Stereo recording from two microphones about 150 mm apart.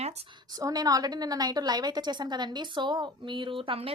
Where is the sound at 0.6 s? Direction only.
25° right (ahead or behind).